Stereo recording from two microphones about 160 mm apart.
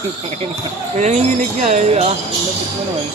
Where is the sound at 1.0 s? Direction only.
45° right (ahead or behind).